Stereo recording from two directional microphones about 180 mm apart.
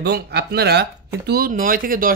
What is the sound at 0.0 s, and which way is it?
Speech, 65° right (ahead or behind).